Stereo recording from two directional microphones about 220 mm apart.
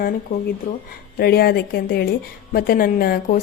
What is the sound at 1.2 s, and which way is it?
A woman's voice, 45° left (ahead or behind).